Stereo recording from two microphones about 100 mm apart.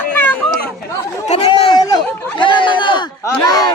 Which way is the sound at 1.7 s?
45° left (ahead or behind).